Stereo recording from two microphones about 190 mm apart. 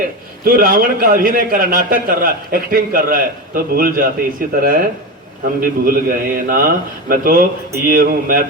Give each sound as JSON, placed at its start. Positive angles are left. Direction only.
{"t": 0.4, "sound": "a man's voice", "side_deg": -50}